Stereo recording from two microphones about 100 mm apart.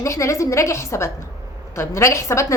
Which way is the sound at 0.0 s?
30° left (ahead or behind).